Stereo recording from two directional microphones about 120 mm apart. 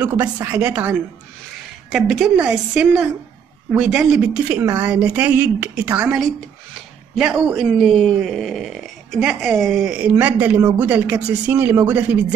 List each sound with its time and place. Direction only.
0.0 s a woman's voice: 35° right (ahead or behind)
0.6 s a woman's voice: 10° right (ahead or behind)
7.2 s a woman's voice: centre (ahead or behind)